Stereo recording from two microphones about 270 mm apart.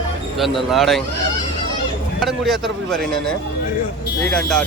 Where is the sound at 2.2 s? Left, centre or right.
Centre.